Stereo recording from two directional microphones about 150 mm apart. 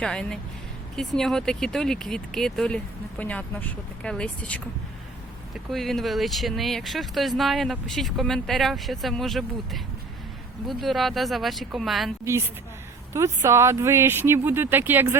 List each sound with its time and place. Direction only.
0.0 s speech: 5° left (ahead or behind)
13.1 s speech: 20° right (ahead or behind)